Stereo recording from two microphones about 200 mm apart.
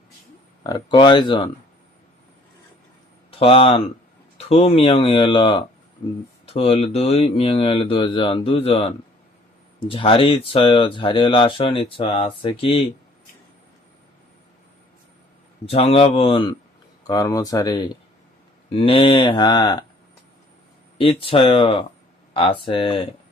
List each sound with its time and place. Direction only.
0.6 s speech: 20° left (ahead or behind)
3.3 s speech: 30° left (ahead or behind)
15.6 s speech: 30° left (ahead or behind)
21.0 s speech: 25° left (ahead or behind)